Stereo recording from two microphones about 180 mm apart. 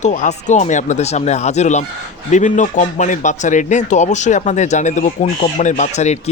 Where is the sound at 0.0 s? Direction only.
40° left (ahead or behind).